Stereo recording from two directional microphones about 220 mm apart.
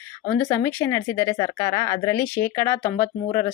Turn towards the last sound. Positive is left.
turn(degrees=15)  # may be behind; listen again after turning